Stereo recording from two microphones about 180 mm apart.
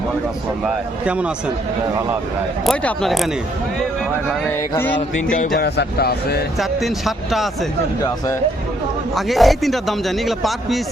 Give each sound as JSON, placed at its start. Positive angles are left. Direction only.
{"t": 0.6, "sound": "a man's voice", "side_deg": -5}
{"t": 2.6, "sound": "a man's voice", "side_deg": 0}
{"t": 4.7, "sound": "music", "side_deg": 10}
{"t": 5.5, "sound": "speech", "side_deg": 60}
{"t": 6.6, "sound": "a man's voice", "side_deg": 0}
{"t": 9.1, "sound": "a man's voice", "side_deg": 0}